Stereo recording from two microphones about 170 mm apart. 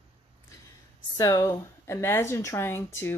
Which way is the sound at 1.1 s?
20° left (ahead or behind).